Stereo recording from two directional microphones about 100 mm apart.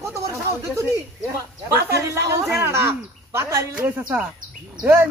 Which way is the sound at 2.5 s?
25° right (ahead or behind).